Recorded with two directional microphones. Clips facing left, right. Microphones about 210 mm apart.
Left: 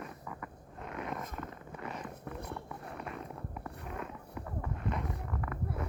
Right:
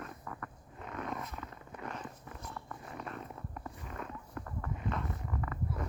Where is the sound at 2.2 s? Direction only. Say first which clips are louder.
Left 6 dB; 60° left (ahead or behind).